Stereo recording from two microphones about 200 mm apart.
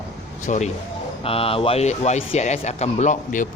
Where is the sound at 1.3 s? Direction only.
30° left (ahead or behind).